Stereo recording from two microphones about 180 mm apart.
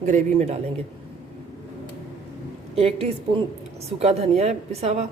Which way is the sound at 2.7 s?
35° right (ahead or behind).